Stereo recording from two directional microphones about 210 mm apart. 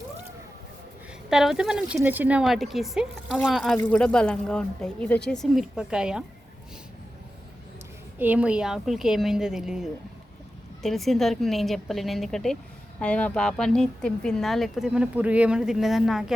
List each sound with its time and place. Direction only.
1.3 s speech: centre (ahead or behind)
8.2 s speech: 5° right (ahead or behind)